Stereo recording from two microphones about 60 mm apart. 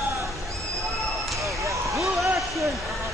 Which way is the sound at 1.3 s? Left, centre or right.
Right.